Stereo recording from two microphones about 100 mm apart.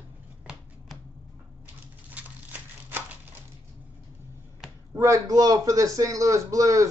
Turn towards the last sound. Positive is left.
turn(degrees=-35)  # may be behind; listen again after turning